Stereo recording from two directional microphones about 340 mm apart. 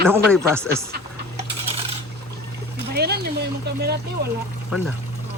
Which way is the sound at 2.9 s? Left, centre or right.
Right.